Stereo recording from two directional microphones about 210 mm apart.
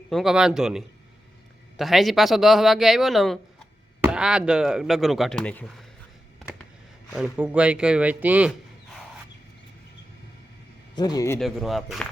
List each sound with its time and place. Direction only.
0.1 s speech: centre (ahead or behind)
7.1 s speech: 5° right (ahead or behind)
10.9 s a man's voice: 20° left (ahead or behind)
11.3 s speech: centre (ahead or behind)